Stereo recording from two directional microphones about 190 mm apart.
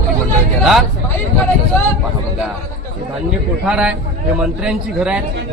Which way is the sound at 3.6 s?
5° right (ahead or behind).